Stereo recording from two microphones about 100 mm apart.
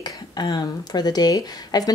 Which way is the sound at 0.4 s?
45° left (ahead or behind).